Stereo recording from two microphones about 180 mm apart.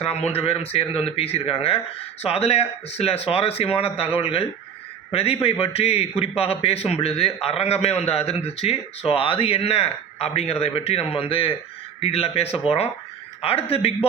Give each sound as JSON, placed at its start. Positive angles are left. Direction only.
{"t": 0.0, "sound": "a man's voice", "side_deg": 35}
{"t": 13.7, "sound": "a man's voice", "side_deg": 35}